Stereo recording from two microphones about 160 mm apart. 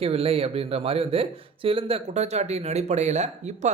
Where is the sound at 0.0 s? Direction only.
40° right (ahead or behind).